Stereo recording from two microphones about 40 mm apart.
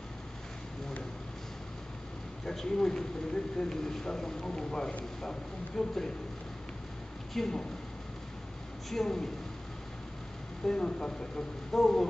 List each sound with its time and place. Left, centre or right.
2.4 s speech: centre
7.3 s speech: centre
8.9 s speech: centre
10.7 s speech: centre